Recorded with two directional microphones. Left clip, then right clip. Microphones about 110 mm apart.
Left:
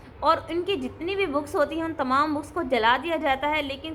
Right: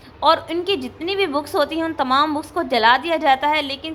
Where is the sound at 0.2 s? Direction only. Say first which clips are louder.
Right 6 dB; 20° right (ahead or behind).